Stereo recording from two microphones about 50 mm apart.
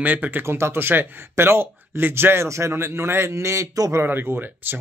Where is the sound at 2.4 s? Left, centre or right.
Right.